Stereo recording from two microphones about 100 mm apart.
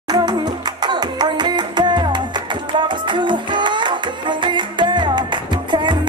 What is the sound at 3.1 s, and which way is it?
Music, 50° right (ahead or behind).